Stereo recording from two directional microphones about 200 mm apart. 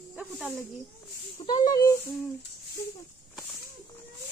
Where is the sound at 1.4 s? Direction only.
25° left (ahead or behind).